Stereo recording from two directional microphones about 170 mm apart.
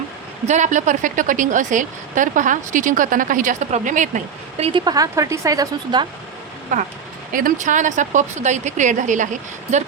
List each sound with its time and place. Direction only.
0.4 s speech: 45° right (ahead or behind)
4.9 s speech: 20° right (ahead or behind)
6.7 s speech: 45° right (ahead or behind)